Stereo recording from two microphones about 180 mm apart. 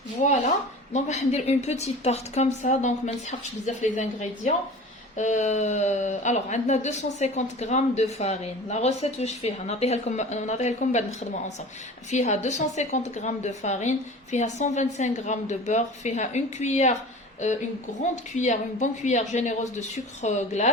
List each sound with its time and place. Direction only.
0.2 s speech: 40° left (ahead or behind)
18.3 s speech: 40° left (ahead or behind)